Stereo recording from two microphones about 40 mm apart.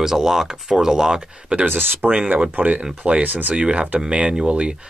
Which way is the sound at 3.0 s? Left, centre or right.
Right.